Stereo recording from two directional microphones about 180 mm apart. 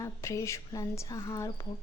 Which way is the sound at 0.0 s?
15° left (ahead or behind).